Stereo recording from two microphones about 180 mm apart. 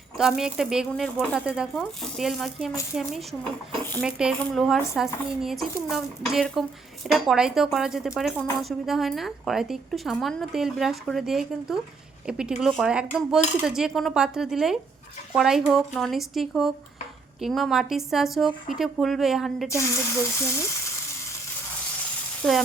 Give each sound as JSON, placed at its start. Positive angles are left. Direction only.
{"t": 0.2, "sound": "a woman's voice", "side_deg": -5}
{"t": 19.6, "sound": "speech", "side_deg": 15}
{"t": 22.4, "sound": "a woman's voice", "side_deg": 5}